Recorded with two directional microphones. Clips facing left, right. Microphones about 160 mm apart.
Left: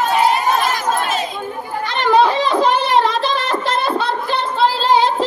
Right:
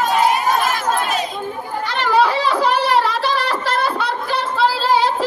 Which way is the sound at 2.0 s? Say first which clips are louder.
Left 2 dB; 20° left (ahead or behind).